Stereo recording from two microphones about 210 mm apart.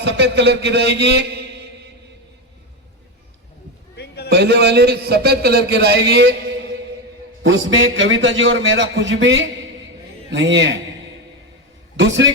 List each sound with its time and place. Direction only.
0.0 s a man's voice: 55° right (ahead or behind)
3.9 s a sound: 50° left (ahead or behind)
4.3 s a man's voice: 50° right (ahead or behind)
7.4 s a man's voice: 65° right (ahead or behind)
11.9 s a man's voice: 60° right (ahead or behind)